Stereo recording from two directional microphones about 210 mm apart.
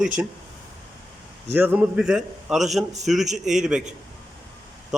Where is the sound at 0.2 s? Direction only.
5° right (ahead or behind).